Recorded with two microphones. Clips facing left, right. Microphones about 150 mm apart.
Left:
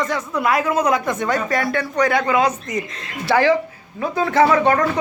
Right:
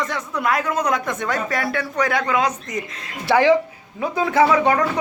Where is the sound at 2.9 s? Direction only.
15° right (ahead or behind).